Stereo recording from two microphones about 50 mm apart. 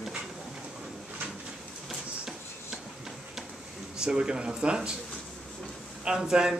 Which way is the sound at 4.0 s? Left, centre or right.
Centre.